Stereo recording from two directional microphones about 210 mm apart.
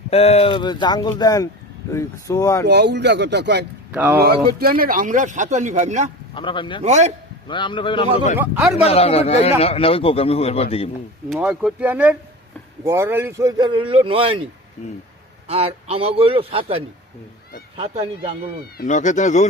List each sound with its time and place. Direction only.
0.1 s speech: 30° left (ahead or behind)
2.6 s speech: 55° right (ahead or behind)
3.9 s speech: 10° right (ahead or behind)
4.4 s speech: 45° right (ahead or behind)
6.3 s speech: 25° left (ahead or behind)
6.8 s speech: 30° right (ahead or behind)
7.4 s speech: 25° left (ahead or behind)
8.4 s speech: 10° right (ahead or behind)
8.8 s speech: 30° left (ahead or behind)
11.3 s a man's voice: 5° right (ahead or behind); by 14.4 s 25° right (ahead or behind)
15.4 s a man's voice: 30° right (ahead or behind)
18.8 s speech: 35° left (ahead or behind)